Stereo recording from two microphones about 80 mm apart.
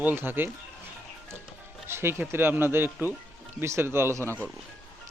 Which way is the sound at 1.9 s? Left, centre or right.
Right.